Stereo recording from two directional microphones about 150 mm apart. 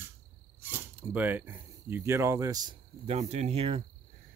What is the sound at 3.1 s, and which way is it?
Speech, 45° right (ahead or behind).